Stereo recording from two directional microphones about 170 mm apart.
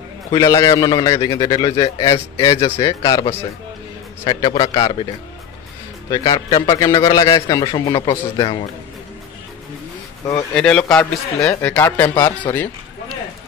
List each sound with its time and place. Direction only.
0.3 s a man's voice: 20° left (ahead or behind)
4.2 s a man's voice: 30° left (ahead or behind)
6.0 s a man's voice: 20° left (ahead or behind)
10.5 s a man's voice: 5° left (ahead or behind)